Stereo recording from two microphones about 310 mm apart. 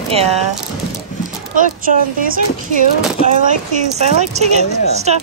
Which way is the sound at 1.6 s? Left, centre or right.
Right.